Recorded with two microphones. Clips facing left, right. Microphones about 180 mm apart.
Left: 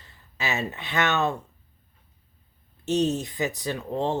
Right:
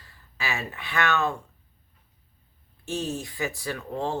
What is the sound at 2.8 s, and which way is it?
Speech, 20° left (ahead or behind).